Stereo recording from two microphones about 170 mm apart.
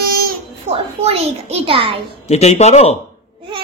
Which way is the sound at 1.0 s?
35° right (ahead or behind).